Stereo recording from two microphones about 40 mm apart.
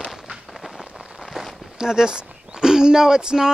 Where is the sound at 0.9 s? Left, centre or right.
Centre.